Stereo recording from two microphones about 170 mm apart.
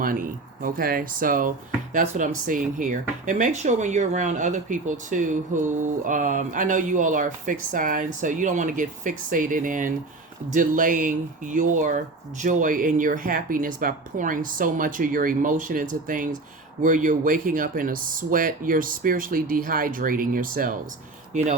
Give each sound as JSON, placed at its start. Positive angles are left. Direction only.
{"t": 0.6, "sound": "speech", "side_deg": -60}